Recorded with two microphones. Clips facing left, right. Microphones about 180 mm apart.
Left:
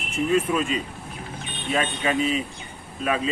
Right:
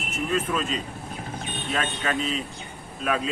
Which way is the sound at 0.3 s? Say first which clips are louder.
Left 3 dB; 10° left (ahead or behind).